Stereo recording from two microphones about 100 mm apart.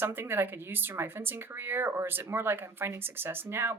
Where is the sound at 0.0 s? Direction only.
20° right (ahead or behind).